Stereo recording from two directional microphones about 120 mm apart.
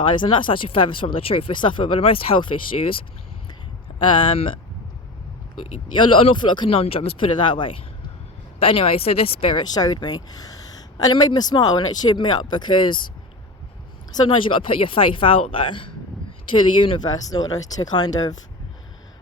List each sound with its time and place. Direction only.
0.0 s speech: 45° left (ahead or behind)
4.0 s speech: 45° left (ahead or behind)
6.0 s speech: 45° left (ahead or behind)
14.3 s speech: 45° left (ahead or behind)